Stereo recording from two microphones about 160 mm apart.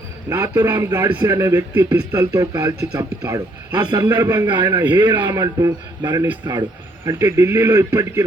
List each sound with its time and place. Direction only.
0.3 s speech: 20° right (ahead or behind)